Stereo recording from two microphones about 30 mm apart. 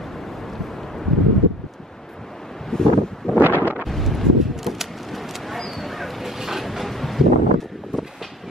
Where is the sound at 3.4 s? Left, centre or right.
Right.